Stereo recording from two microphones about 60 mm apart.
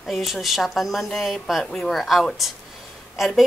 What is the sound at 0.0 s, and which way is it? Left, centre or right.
A woman's voice, centre.